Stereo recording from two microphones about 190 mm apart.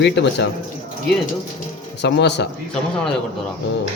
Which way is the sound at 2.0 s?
65° left (ahead or behind).